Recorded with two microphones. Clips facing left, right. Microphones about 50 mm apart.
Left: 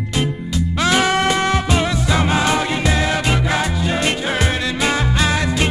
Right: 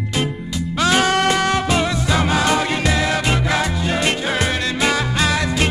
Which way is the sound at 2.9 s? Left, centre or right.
Left.